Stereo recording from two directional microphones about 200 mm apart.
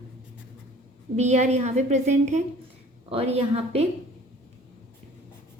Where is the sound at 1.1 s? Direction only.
35° right (ahead or behind).